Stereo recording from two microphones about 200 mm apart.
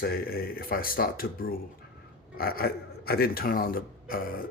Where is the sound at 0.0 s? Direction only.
50° left (ahead or behind).